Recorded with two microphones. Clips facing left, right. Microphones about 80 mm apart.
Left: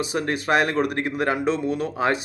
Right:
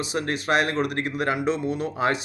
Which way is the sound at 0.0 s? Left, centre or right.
Left.